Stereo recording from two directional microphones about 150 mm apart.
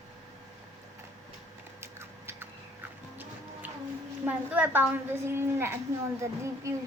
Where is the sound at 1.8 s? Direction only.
15° right (ahead or behind).